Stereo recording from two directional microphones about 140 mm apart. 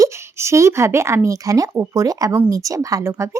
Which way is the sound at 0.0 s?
20° right (ahead or behind).